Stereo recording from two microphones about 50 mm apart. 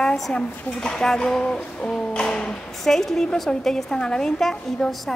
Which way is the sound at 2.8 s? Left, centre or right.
Centre.